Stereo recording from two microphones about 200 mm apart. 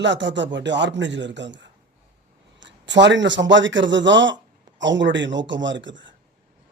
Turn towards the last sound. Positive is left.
turn(degrees=-65)  # may be behind; listen again after turning